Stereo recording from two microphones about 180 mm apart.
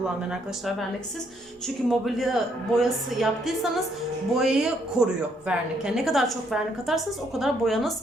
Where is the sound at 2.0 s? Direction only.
Centre (ahead or behind).